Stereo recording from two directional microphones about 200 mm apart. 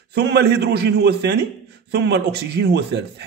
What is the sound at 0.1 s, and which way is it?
A man's voice, 55° right (ahead or behind).